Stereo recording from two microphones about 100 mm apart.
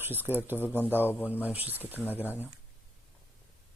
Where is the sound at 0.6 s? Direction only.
15° left (ahead or behind).